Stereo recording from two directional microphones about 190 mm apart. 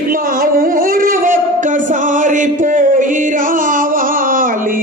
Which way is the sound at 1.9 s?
40° right (ahead or behind).